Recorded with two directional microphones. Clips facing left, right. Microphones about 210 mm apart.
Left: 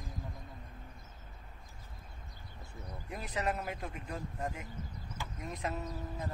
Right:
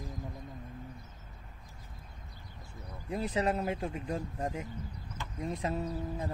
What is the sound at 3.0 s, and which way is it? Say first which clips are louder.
Speech: right 6 dB; 30° right (ahead or behind).